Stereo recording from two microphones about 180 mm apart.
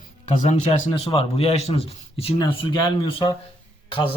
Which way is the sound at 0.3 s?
35° left (ahead or behind).